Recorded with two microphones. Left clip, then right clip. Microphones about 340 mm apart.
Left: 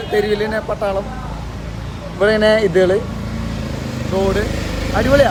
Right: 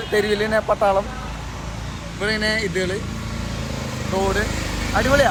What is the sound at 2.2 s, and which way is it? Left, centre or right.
Speech, centre.